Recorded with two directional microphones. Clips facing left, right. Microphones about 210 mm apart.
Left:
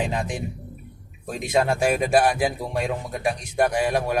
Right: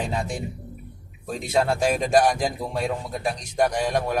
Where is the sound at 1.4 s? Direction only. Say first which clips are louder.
Left 1 dB; 10° left (ahead or behind).